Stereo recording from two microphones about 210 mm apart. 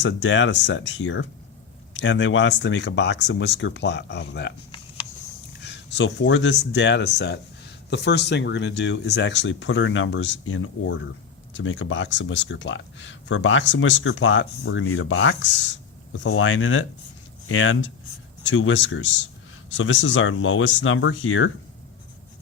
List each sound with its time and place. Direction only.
0.0 s speech: 60° left (ahead or behind)
5.6 s speech: 55° left (ahead or behind)